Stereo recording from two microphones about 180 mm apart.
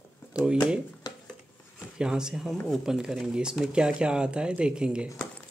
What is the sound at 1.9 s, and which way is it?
Speech, 5° right (ahead or behind).